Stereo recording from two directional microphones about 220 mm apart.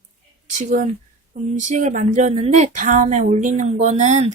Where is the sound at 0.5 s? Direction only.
35° right (ahead or behind).